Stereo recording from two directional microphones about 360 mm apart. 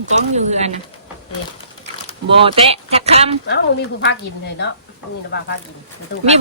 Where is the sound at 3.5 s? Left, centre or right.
Left.